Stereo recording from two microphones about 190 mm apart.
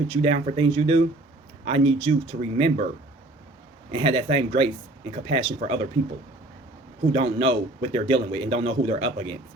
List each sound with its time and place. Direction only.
0.1 s a man's voice: 30° right (ahead or behind)
3.9 s a man's voice: 25° right (ahead or behind)
7.1 s a man's voice: 30° right (ahead or behind)